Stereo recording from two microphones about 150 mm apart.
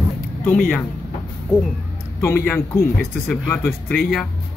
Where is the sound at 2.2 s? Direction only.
15° left (ahead or behind).